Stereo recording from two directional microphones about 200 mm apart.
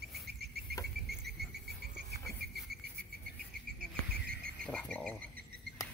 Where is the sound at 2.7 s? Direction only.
50° right (ahead or behind).